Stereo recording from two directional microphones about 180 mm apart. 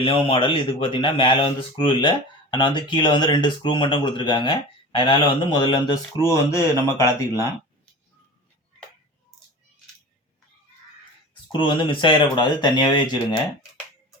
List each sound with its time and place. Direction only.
0.0 s speech: 30° left (ahead or behind)
11.5 s speech: 25° left (ahead or behind)